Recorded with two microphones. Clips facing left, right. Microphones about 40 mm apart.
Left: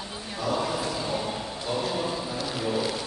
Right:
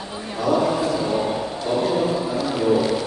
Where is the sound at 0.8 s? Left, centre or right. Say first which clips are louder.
Right 8 dB; centre.